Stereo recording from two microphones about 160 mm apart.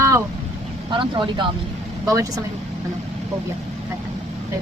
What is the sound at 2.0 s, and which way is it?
Speech, 20° right (ahead or behind).